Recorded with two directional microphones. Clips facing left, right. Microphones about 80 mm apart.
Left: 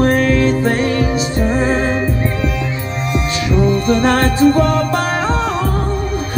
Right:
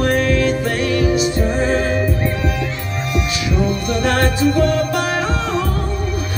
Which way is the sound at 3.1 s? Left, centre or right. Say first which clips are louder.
Left 4 dB; left.